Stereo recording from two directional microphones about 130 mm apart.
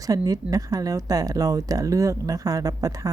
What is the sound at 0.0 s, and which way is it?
Speech, 25° right (ahead or behind).